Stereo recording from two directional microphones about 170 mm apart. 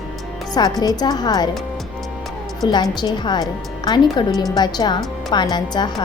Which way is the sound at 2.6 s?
25° left (ahead or behind).